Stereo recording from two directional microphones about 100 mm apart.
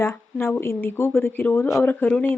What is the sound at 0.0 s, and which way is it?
Speech, 25° left (ahead or behind).